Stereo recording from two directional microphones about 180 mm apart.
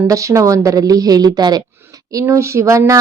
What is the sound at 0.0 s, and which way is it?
A woman's voice, 15° right (ahead or behind).